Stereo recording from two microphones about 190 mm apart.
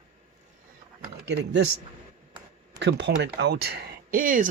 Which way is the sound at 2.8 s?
65° right (ahead or behind).